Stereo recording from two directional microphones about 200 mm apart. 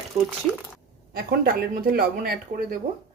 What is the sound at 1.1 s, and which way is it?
Speech, 50° right (ahead or behind).